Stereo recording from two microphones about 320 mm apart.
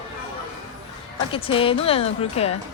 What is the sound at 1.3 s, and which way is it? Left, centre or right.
Speech, centre.